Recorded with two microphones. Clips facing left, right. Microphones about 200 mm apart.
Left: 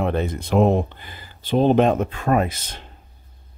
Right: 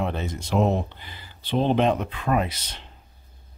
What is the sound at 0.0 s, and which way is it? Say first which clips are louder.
Speech: left 6 dB; 55° left (ahead or behind).